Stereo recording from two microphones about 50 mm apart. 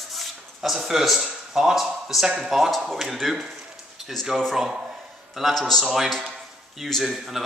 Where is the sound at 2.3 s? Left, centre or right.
Centre.